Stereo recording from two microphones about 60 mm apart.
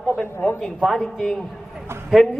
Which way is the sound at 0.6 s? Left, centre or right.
Centre.